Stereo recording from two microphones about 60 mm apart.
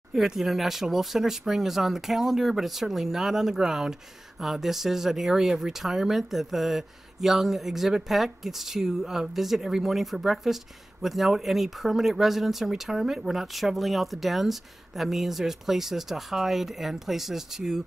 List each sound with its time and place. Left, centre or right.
0.1 s speech: centre